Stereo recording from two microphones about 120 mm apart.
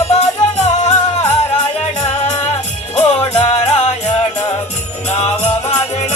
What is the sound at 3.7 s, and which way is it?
Music, 75° left (ahead or behind).